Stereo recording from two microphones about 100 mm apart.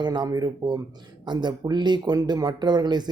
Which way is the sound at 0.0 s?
45° right (ahead or behind).